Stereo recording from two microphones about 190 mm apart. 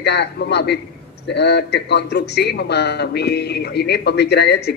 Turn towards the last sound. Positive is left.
turn(degrees=60)  # may be behind; listen again after turning